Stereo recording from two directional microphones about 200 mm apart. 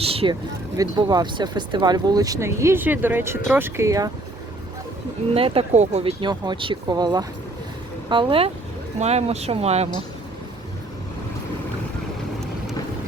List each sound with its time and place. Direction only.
0.0 s speech: 30° right (ahead or behind)
5.3 s speech: 30° right (ahead or behind)